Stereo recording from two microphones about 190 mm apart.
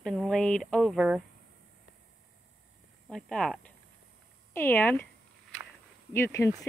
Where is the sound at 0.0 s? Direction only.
Centre (ahead or behind).